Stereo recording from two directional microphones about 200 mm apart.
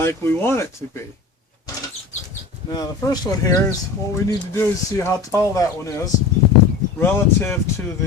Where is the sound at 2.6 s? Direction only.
20° left (ahead or behind).